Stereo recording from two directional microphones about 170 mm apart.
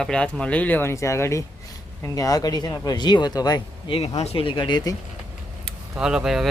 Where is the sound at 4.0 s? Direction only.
40° left (ahead or behind).